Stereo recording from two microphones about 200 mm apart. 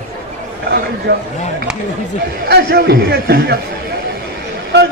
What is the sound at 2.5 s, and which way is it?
A man's voice, 55° right (ahead or behind).